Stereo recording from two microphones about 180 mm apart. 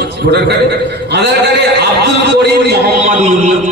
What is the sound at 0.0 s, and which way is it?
A man's voice, 65° right (ahead or behind).